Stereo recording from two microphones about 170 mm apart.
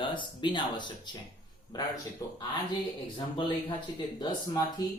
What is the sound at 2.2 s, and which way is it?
Speech, 20° left (ahead or behind).